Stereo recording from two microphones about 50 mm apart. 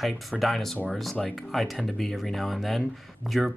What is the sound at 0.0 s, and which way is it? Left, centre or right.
Speech, centre.